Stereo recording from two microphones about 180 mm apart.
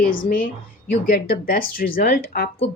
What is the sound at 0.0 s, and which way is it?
Speech, 50° left (ahead or behind).